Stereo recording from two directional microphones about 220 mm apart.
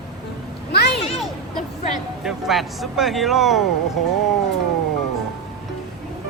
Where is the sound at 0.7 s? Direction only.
45° left (ahead or behind).